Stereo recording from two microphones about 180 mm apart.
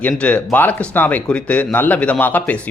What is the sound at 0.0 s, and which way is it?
Speech, 5° left (ahead or behind).